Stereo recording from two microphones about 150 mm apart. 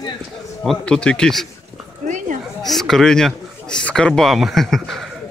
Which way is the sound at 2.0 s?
60° right (ahead or behind).